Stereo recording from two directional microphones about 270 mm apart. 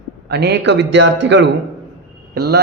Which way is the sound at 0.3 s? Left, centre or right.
Right.